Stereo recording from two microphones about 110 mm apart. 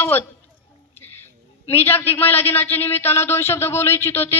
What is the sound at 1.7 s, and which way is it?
A man's voice, 20° left (ahead or behind).